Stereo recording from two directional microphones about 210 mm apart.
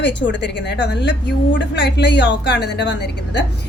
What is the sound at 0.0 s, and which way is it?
A woman's voice, 55° left (ahead or behind).